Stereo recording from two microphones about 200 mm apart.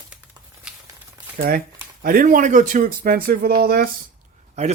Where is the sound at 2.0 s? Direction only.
45° right (ahead or behind).